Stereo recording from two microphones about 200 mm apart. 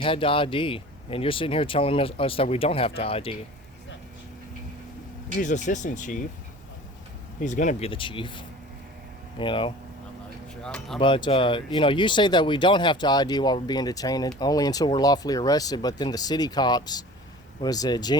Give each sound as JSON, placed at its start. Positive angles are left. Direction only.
{"t": 0.0, "sound": "speech", "side_deg": 25}
{"t": 5.4, "sound": "speech", "side_deg": 35}
{"t": 7.4, "sound": "speech", "side_deg": 35}
{"t": 10.6, "sound": "speech", "side_deg": 5}
{"t": 11.0, "sound": "speech", "side_deg": 25}